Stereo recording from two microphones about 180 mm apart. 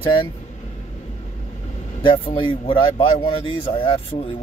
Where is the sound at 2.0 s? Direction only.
30° left (ahead or behind).